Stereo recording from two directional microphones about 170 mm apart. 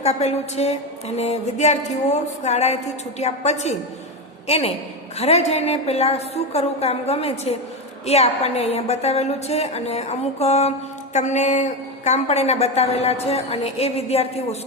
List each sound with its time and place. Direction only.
0.0 s a woman's voice: 40° left (ahead or behind)